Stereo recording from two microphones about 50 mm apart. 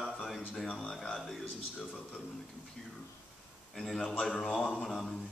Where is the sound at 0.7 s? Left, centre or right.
Left.